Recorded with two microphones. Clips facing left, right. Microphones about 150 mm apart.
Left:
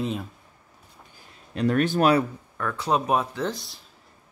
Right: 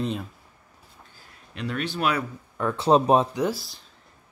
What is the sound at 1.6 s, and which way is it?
Speech, 45° left (ahead or behind).